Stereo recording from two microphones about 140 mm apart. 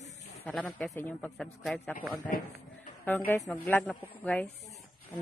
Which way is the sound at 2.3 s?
90° left.